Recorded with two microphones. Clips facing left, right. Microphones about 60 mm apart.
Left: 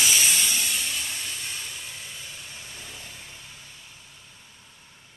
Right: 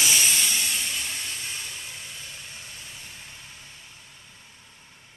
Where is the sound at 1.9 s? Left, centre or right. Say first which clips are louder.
Even; centre.